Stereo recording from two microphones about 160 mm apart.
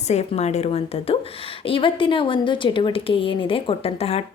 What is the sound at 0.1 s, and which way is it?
A woman's voice, 45° left (ahead or behind).